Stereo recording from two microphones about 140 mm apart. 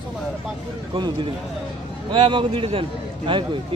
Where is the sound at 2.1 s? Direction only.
35° right (ahead or behind).